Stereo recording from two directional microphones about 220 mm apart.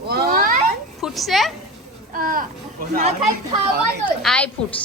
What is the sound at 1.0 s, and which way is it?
Speech, centre (ahead or behind).